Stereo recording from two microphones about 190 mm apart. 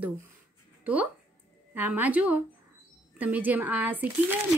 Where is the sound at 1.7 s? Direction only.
10° right (ahead or behind).